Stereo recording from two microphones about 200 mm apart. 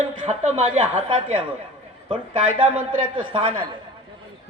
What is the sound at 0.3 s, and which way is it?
A man's voice, 30° right (ahead or behind).